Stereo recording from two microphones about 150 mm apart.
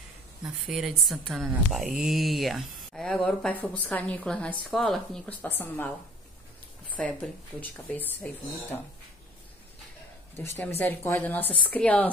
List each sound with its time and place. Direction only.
0.5 s a woman's voice: 5° right (ahead or behind)
10.3 s a woman's voice: 15° left (ahead or behind)